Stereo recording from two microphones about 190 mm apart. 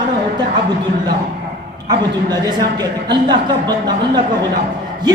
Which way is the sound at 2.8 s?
20° right (ahead or behind).